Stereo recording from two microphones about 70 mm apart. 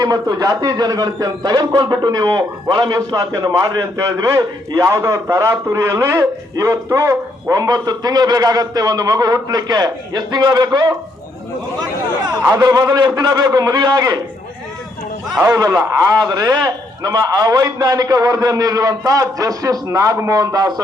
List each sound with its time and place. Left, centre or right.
0.0 s a man's voice: right
0.3 s a man's voice: right
0.7 s a man's voice: right
3.6 s a man's voice: right
7.5 s a man's voice: right
12.9 s a man's voice: right
15.5 s a man's voice: right